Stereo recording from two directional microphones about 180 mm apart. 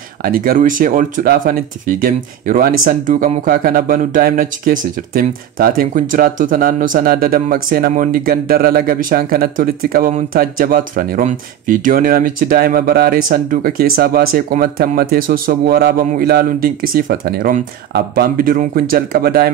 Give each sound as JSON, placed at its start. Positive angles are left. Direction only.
{"t": 0.2, "sound": "speech", "side_deg": -50}